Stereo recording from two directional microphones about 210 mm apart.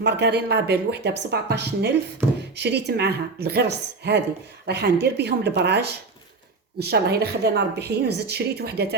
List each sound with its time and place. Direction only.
0.0 s a woman's voice: 50° right (ahead or behind)